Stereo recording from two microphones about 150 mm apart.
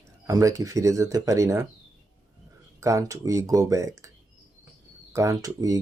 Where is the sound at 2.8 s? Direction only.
20° right (ahead or behind).